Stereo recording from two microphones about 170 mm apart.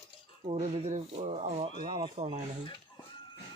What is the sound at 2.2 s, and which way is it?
Speech, 40° right (ahead or behind).